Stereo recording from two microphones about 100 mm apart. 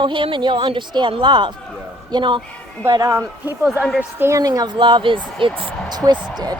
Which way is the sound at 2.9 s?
30° right (ahead or behind).